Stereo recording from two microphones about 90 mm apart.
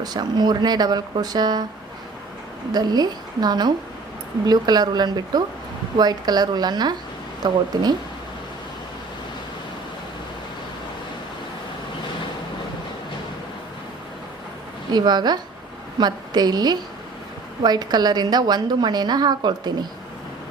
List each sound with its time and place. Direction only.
0.0 s a woman's voice: 50° right (ahead or behind)
2.7 s a woman's voice: 50° right (ahead or behind)
14.9 s a woman's voice: 50° right (ahead or behind)